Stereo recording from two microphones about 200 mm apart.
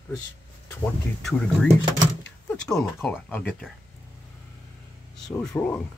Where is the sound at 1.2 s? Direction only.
Centre (ahead or behind).